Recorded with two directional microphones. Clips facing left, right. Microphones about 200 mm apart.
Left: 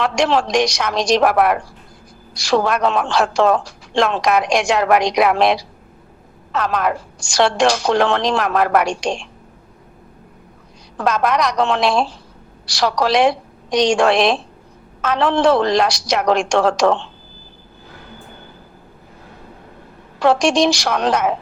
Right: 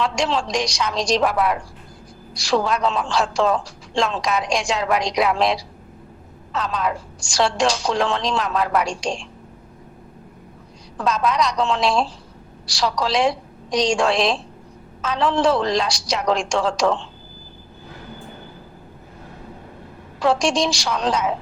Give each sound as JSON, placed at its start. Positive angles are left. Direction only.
{"t": 0.0, "sound": "a woman's voice", "side_deg": 65}
{"t": 10.9, "sound": "a woman's voice", "side_deg": 65}
{"t": 20.1, "sound": "a woman's voice", "side_deg": 65}